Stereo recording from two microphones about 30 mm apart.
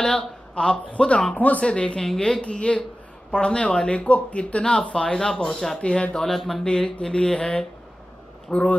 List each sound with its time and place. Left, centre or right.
0.0 s speech: left
1.3 s speech: left
1.6 s speech: left
2.1 s speech: left
4.1 s speech: left
4.9 s speech: left
5.8 s speech: left
6.3 s speech: centre
6.6 s speech: left
8.5 s speech: left